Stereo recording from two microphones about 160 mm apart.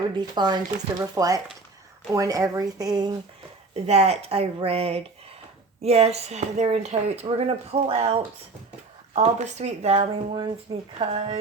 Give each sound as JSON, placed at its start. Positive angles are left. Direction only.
{"t": 0.1, "sound": "speech", "side_deg": -25}
{"t": 3.8, "sound": "a woman's voice", "side_deg": -40}